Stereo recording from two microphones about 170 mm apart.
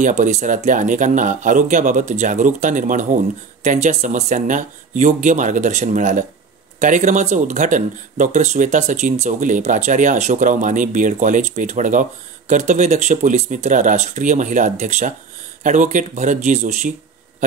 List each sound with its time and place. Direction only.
0.0 s speech: 45° right (ahead or behind)